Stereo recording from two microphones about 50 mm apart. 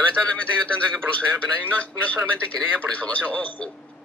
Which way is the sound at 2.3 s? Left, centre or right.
Left.